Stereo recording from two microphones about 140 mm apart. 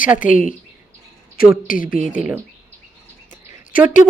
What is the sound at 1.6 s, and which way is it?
Speech, 80° left.